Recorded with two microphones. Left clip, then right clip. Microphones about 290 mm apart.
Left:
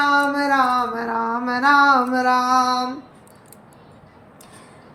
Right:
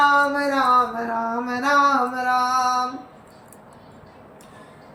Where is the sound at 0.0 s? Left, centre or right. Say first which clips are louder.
Right 1 dB; centre.